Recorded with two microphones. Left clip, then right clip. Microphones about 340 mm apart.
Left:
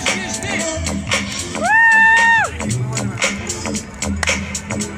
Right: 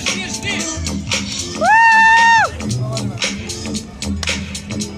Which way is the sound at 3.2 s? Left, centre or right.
Centre.